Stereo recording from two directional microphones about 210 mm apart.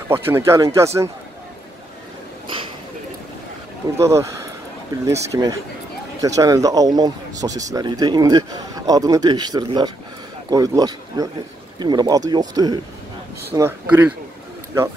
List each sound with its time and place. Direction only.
0.1 s speech: 10° right (ahead or behind)
4.0 s speech: 15° right (ahead or behind)